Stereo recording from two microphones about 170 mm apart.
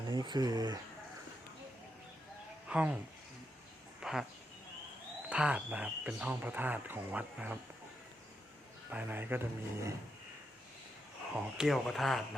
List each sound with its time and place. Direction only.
0.1 s speech: 25° right (ahead or behind)
2.6 s speech: 5° right (ahead or behind)
4.0 s a sound: 5° right (ahead or behind)
5.3 s speech: 5° right (ahead or behind)
8.9 s speech: 10° right (ahead or behind)
11.3 s speech: 5° right (ahead or behind)